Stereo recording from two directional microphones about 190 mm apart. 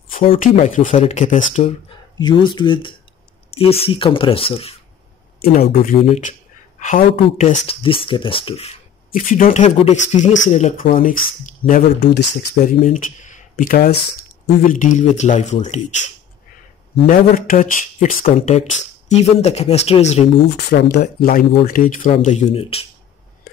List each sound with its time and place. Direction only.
0.4 s speech: 40° left (ahead or behind)
2.1 s speech: 25° left (ahead or behind)
5.4 s speech: 50° left (ahead or behind)
5.7 s speech: 35° left (ahead or behind)
9.1 s speech: 45° left (ahead or behind)
12.8 s speech: 40° left (ahead or behind)
18.3 s speech: 35° left (ahead or behind)
20.5 s speech: 60° left (ahead or behind); by 22.8 s 30° left (ahead or behind)